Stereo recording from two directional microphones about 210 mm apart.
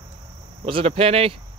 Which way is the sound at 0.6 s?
25° right (ahead or behind).